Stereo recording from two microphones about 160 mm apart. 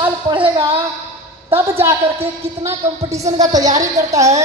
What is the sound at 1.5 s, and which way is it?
A woman's voice, 15° right (ahead or behind).